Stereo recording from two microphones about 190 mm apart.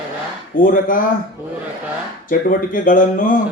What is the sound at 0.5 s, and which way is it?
Speech, 45° left (ahead or behind).